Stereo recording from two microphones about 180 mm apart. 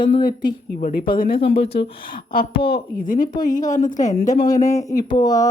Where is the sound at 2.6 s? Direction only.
55° left (ahead or behind).